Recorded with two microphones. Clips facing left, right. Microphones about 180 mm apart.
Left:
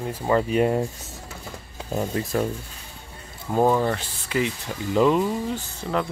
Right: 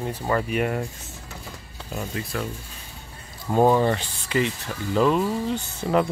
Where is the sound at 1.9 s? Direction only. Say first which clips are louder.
Left 5 dB; 30° left (ahead or behind).